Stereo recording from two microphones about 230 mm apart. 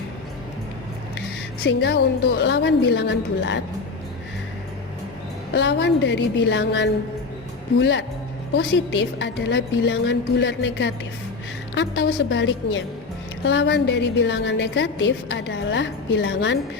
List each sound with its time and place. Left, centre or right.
1.6 s a woman's voice: left
5.5 s a woman's voice: left